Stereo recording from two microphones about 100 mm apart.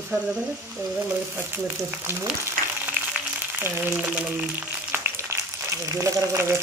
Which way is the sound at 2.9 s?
20° right (ahead or behind).